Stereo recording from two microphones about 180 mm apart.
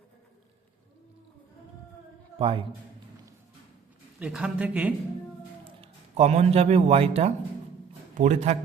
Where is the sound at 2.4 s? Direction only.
30° right (ahead or behind).